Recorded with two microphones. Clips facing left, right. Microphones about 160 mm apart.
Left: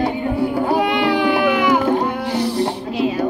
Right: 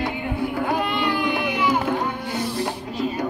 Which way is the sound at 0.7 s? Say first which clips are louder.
Left 6 dB; 85° left.